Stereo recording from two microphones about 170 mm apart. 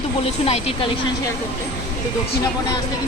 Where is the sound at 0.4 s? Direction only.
35° left (ahead or behind).